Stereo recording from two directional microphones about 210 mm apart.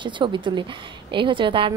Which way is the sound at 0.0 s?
20° right (ahead or behind).